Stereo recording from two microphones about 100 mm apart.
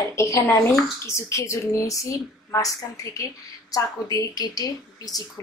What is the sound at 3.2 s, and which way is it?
Speech, 35° left (ahead or behind).